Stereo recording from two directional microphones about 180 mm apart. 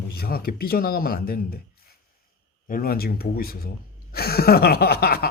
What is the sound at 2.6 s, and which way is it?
Speech, 50° left (ahead or behind).